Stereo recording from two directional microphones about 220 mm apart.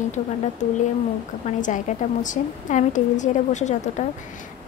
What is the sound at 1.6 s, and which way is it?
A woman's voice, 35° left (ahead or behind).